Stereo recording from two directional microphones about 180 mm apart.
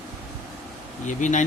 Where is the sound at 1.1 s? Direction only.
45° left (ahead or behind).